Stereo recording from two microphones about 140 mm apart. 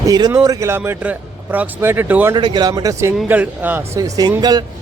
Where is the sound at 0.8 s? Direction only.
10° right (ahead or behind).